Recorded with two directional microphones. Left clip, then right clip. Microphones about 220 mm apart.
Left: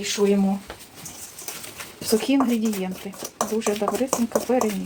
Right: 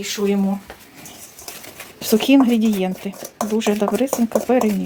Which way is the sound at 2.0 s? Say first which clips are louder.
Right 6 dB; 45° right (ahead or behind).